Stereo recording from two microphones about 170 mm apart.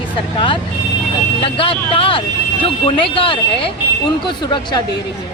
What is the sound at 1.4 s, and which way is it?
Speech, 30° left (ahead or behind).